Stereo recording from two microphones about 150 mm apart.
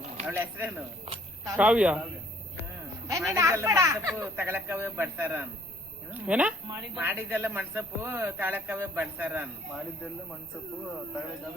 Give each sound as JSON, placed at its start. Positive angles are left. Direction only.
{"t": 0.3, "sound": "a man's voice", "side_deg": -15}
{"t": 3.1, "sound": "a man's voice", "side_deg": -20}